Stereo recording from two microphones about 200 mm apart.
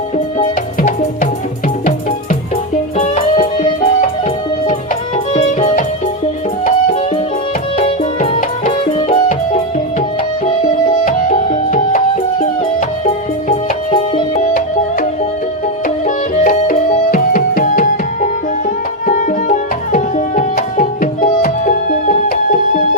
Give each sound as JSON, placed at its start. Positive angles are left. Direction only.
{"t": 0.3, "sound": "music", "side_deg": 40}
{"t": 3.0, "sound": "music", "side_deg": 35}
{"t": 7.8, "sound": "music", "side_deg": 30}
{"t": 9.0, "sound": "music", "side_deg": 25}
{"t": 11.0, "sound": "music", "side_deg": 40}
{"t": 13.9, "sound": "music", "side_deg": 35}
{"t": 16.0, "sound": "music", "side_deg": 40}
{"t": 19.9, "sound": "tabla", "side_deg": 40}